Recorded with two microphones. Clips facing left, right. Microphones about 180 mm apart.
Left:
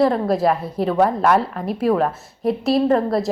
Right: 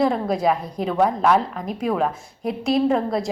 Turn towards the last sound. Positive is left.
turn(degrees=0)  # may be behind; listen again after turning